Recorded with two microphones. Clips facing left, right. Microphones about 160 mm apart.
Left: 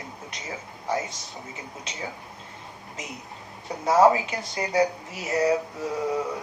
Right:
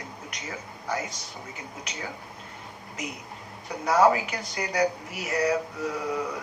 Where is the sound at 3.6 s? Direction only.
25° left (ahead or behind).